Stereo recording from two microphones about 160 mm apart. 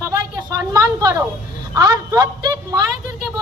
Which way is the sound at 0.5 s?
20° right (ahead or behind).